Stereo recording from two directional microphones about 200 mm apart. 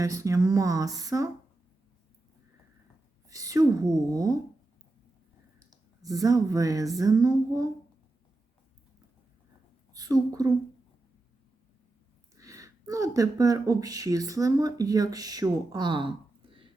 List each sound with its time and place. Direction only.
0.0 s a woman's voice: 15° right (ahead or behind)
3.2 s a woman's voice: 15° right (ahead or behind)
5.7 s a woman's voice: 20° right (ahead or behind)
9.9 s a woman's voice: 20° right (ahead or behind)
12.4 s speech: 15° right (ahead or behind)